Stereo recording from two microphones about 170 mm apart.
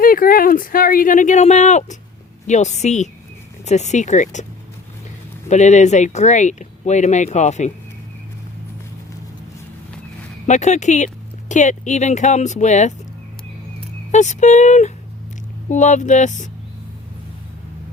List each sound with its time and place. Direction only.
0.0 s speech: 55° left (ahead or behind)
5.5 s speech: 45° left (ahead or behind)
10.4 s speech: 45° left (ahead or behind)
14.1 s speech: 45° left (ahead or behind)